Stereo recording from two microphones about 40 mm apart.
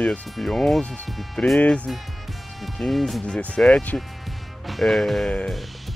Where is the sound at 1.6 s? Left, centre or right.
Left.